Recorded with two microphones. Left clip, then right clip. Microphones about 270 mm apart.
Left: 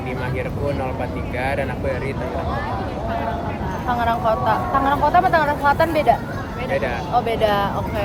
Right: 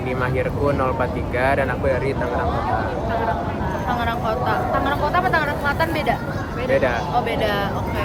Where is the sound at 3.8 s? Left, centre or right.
Centre.